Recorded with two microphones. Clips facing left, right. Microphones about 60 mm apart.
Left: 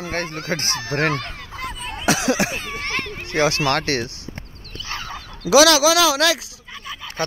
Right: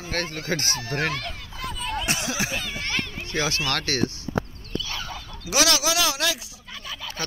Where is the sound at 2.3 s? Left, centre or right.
Left.